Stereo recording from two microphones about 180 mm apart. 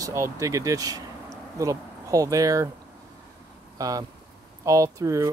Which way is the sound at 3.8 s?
20° right (ahead or behind).